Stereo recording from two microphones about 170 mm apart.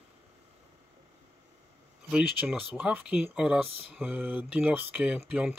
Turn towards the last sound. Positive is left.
turn(degrees=-5)  # may be behind; listen again after turning